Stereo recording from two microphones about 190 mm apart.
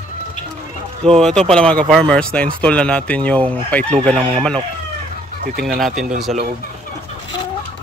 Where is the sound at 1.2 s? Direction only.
5° left (ahead or behind).